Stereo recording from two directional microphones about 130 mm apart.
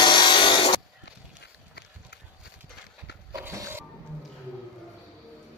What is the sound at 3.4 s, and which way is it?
Music, 20° right (ahead or behind).